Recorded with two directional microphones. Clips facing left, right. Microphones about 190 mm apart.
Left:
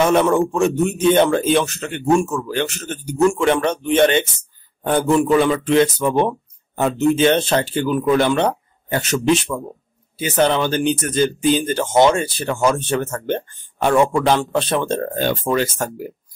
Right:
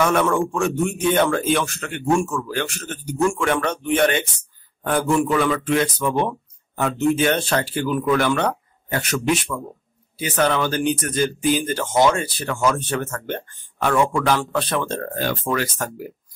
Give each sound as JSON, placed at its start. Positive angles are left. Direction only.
{"t": 0.0, "sound": "speech", "side_deg": 25}